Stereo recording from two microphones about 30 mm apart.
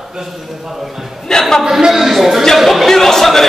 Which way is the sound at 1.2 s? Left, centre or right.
Centre.